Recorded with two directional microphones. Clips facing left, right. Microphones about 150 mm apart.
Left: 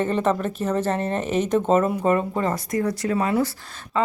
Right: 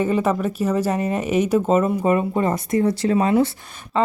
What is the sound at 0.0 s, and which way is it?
A woman's voice, 10° right (ahead or behind).